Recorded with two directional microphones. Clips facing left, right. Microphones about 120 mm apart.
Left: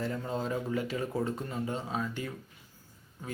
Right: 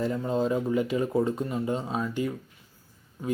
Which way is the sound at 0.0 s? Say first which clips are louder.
Right 7 dB; 20° right (ahead or behind).